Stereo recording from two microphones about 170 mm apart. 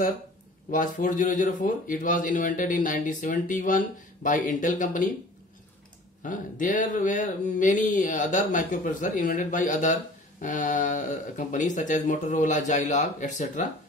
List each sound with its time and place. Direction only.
0.7 s speech: 50° left (ahead or behind)
6.2 s speech: 50° left (ahead or behind)